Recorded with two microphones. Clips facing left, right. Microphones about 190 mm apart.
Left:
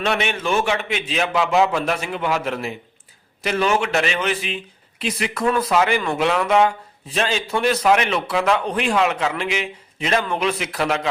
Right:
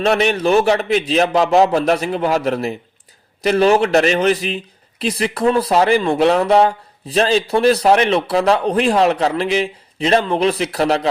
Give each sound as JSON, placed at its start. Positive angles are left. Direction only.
{"t": 0.0, "sound": "a man's voice", "side_deg": -40}